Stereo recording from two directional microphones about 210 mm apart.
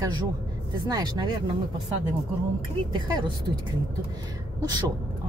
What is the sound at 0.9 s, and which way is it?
Speech, 20° right (ahead or behind).